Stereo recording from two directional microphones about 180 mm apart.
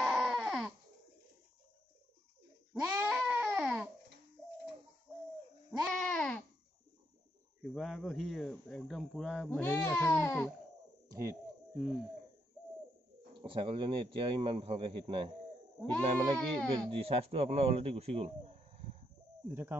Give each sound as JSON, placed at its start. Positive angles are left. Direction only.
{"t": 0.0, "sound": "baby cry", "side_deg": -5}
{"t": 2.8, "sound": "a sound", "side_deg": -10}
{"t": 5.7, "sound": "a sound", "side_deg": 5}
{"t": 7.7, "sound": "speech", "side_deg": 0}
{"t": 9.5, "sound": "speech", "side_deg": 10}
{"t": 11.1, "sound": "a sound", "side_deg": -15}
{"t": 11.7, "sound": "speech", "side_deg": -5}
{"t": 13.4, "sound": "a man's voice", "side_deg": -25}
{"t": 15.8, "sound": "speech", "side_deg": 5}
{"t": 16.9, "sound": "speech", "side_deg": -30}
{"t": 19.4, "sound": "speech", "side_deg": -10}